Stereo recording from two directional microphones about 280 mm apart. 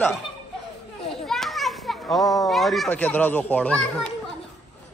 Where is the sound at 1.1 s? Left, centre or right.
Centre.